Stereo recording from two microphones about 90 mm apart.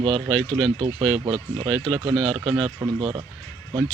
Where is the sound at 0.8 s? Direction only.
65° right (ahead or behind).